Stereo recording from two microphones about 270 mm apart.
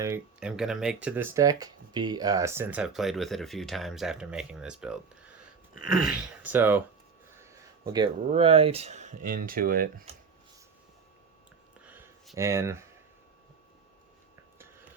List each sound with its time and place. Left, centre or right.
0.0 s speech: centre
7.9 s speech: centre
11.9 s a sound: centre